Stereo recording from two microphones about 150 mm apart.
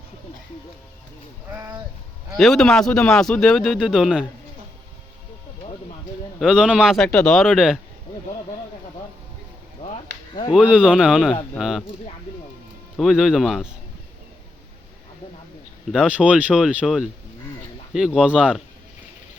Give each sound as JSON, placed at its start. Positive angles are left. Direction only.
{"t": 1.5, "sound": "speech", "side_deg": -20}
{"t": 2.3, "sound": "speech", "side_deg": 0}
{"t": 6.4, "sound": "speech", "side_deg": -5}
{"t": 9.8, "sound": "a sound", "side_deg": 35}
{"t": 10.5, "sound": "speech", "side_deg": -5}
{"t": 13.0, "sound": "speech", "side_deg": 0}
{"t": 15.9, "sound": "speech", "side_deg": -5}